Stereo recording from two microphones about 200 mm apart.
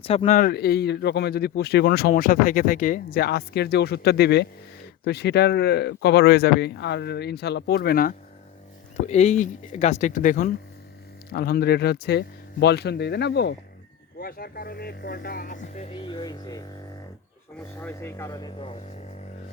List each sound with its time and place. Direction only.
0.0 s speech: 30° left (ahead or behind)
0.3 s speech: 50° left (ahead or behind)
9.0 s speech: 35° left (ahead or behind)
17.7 s speech: 10° left (ahead or behind)